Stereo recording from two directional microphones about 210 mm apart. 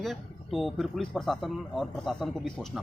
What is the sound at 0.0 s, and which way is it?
Speech, centre (ahead or behind).